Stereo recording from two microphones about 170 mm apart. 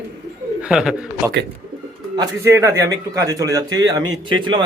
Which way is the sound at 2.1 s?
20° right (ahead or behind).